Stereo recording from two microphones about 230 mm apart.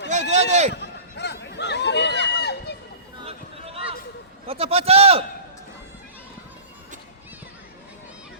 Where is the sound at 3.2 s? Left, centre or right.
Right.